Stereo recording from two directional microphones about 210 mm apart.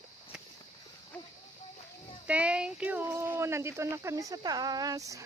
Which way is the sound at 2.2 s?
5° right (ahead or behind).